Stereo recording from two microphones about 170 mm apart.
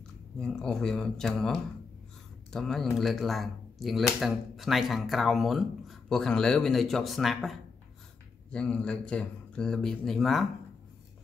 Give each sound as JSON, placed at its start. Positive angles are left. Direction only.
{"t": 0.4, "sound": "speech", "side_deg": 5}